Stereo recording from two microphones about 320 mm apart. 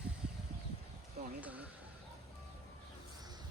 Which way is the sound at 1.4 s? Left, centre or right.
Centre.